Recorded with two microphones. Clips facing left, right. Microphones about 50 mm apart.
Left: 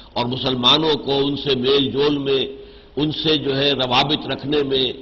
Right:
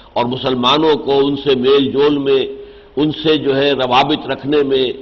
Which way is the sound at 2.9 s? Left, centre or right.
Right.